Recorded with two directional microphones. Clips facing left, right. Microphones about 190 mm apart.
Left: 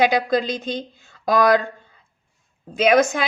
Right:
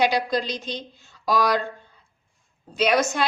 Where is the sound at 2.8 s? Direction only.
50° left (ahead or behind).